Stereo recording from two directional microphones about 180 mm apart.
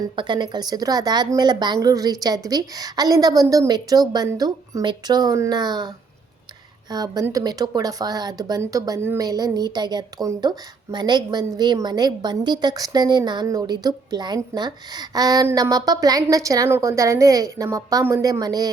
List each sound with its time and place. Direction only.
0.2 s speech: 25° right (ahead or behind)
6.9 s speech: 20° right (ahead or behind)